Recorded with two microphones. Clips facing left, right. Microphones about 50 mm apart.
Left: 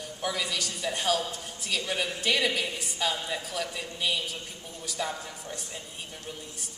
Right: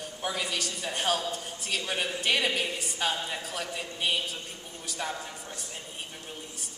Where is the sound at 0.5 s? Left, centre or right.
Right.